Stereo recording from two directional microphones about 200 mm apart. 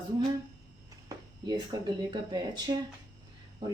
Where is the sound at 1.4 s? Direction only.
20° right (ahead or behind).